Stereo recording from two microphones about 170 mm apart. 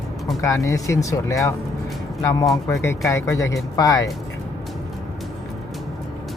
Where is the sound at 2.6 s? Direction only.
15° left (ahead or behind).